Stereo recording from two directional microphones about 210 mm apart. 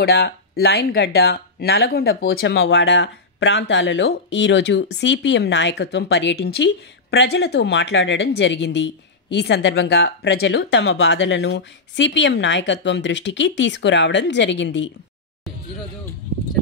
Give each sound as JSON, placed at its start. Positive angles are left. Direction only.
{"t": 0.0, "sound": "speech", "side_deg": 50}